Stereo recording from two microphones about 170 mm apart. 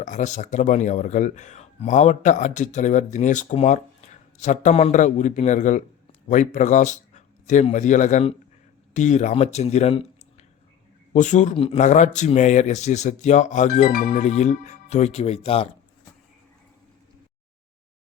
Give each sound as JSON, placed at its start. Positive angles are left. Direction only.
{"t": 0.0, "sound": "speech", "side_deg": 45}
{"t": 11.1, "sound": "speech", "side_deg": 45}
{"t": 11.5, "sound": "speech", "side_deg": 35}